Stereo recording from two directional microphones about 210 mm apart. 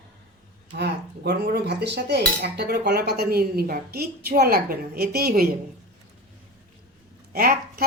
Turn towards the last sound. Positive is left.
turn(degrees=-45)  # may be behind; listen again after turning